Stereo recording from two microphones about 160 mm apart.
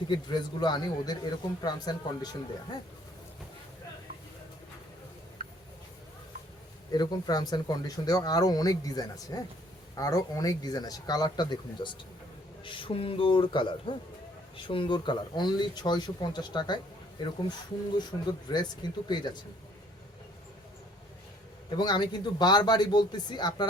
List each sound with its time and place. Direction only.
0.1 s speech: 25° left (ahead or behind)
6.9 s a man's voice: 25° left (ahead or behind)
21.8 s speech: 25° left (ahead or behind)